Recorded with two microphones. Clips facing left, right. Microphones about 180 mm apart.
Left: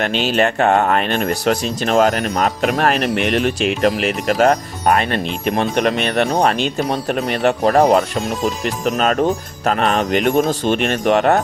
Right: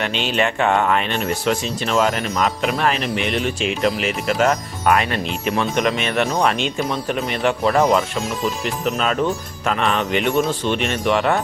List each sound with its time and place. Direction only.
0.1 s speech: centre (ahead or behind)
0.3 s speech: 40° left (ahead or behind)